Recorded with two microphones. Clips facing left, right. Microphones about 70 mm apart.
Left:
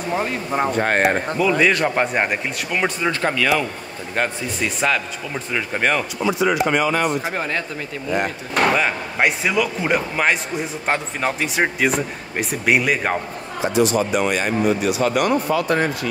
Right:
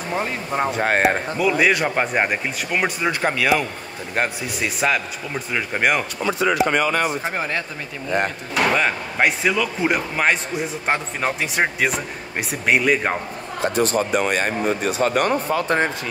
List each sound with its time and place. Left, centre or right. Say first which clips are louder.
0.1 s speech: left 2 dB; centre
6.2 s speech: left 2 dB; right
6.6 s speech: even; left
7.3 s speech: left 1 dB; centre
8.7 s speech: even; centre
13.6 s speech: left 2 dB; right